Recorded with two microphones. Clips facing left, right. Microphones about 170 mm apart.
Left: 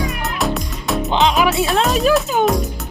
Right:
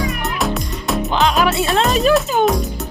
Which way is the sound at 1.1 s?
20° left (ahead or behind).